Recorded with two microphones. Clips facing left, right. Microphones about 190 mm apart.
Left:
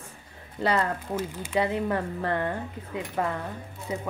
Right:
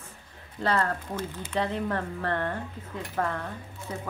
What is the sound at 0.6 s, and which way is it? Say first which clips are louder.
A woman's voice: left 1 dB; 10° left (ahead or behind).